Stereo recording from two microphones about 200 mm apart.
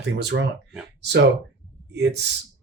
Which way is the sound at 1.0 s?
60° right (ahead or behind).